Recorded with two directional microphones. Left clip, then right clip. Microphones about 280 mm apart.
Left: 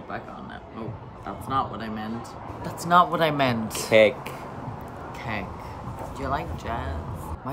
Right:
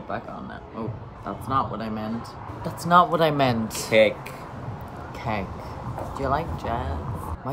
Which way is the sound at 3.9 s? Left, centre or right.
Centre.